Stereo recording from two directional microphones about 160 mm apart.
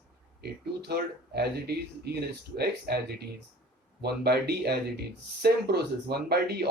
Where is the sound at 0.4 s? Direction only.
80° right.